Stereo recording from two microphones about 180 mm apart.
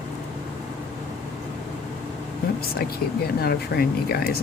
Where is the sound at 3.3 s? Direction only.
60° left (ahead or behind).